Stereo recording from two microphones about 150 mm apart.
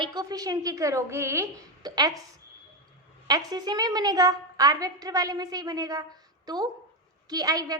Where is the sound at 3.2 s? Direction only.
25° right (ahead or behind).